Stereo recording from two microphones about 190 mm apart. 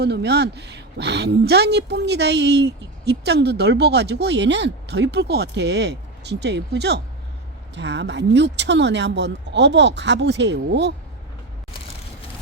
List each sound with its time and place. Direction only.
0.0 s a woman's voice: 60° right (ahead or behind)